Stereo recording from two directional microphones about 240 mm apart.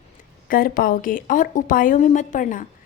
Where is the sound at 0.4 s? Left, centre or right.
Left.